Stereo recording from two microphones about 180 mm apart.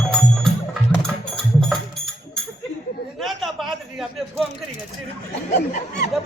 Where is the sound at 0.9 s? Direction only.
5° left (ahead or behind).